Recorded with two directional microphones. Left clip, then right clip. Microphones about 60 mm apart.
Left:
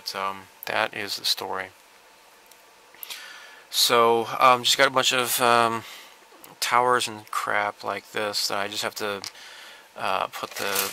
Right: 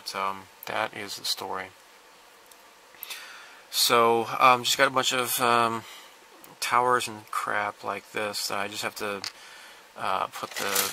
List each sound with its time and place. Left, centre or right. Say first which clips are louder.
0.0 s speech: left 1 dB; left
3.7 s speech: left 2 dB; left